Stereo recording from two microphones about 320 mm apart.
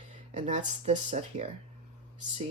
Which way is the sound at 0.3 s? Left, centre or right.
Right.